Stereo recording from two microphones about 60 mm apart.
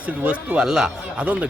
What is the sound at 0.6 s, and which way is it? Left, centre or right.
Speech, centre.